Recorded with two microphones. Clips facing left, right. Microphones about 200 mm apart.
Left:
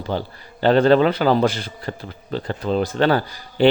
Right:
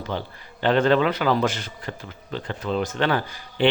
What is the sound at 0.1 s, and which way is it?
A man's voice, 35° left (ahead or behind).